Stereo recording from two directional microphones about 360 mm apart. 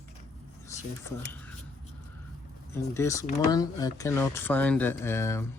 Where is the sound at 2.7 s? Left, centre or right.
Centre.